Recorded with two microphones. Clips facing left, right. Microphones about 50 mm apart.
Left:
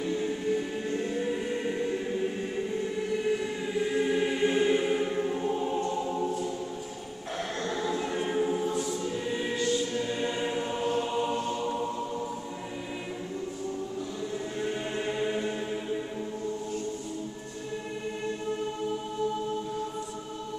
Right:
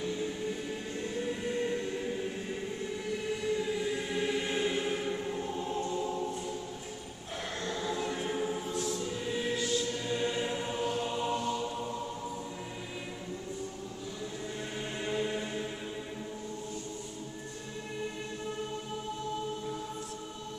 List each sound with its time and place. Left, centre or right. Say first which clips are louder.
0.0 s train: left 5 dB; centre
7.6 s a sound: left 4 dB; left
7.9 s choir: left 4 dB; centre
11.1 s music: left 4 dB; centre
11.3 s music: left 2 dB; left
14.6 s music: left 7 dB; centre